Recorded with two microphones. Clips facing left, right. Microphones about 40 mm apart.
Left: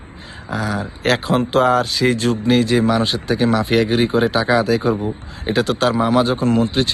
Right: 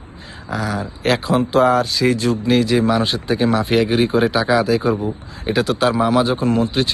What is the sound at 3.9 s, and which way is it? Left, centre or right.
Speech, left.